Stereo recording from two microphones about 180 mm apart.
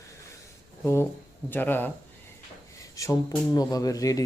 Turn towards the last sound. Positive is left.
turn(degrees=20)  # may be behind; listen again after turning